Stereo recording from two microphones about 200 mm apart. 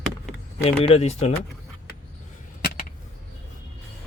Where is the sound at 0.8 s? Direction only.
30° left (ahead or behind).